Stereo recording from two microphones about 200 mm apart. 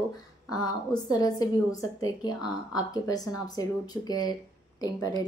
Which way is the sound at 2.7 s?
20° left (ahead or behind).